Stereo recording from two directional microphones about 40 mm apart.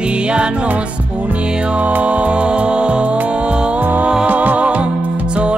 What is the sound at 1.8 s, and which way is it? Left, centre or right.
Music, right.